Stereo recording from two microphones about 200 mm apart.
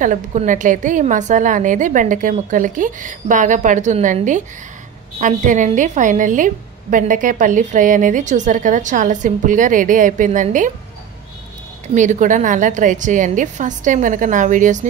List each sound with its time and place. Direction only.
0.0 s a woman's voice: 40° right (ahead or behind)
11.9 s a woman's voice: 40° right (ahead or behind)